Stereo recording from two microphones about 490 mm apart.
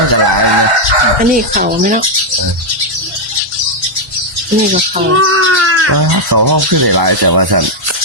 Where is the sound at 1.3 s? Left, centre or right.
Centre.